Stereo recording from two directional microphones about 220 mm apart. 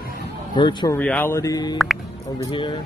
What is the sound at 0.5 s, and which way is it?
Speech, 20° left (ahead or behind).